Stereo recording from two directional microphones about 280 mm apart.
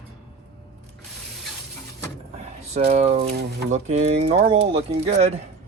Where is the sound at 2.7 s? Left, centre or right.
Right.